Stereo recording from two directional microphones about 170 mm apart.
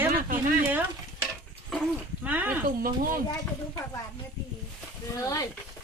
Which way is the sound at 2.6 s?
55° right (ahead or behind).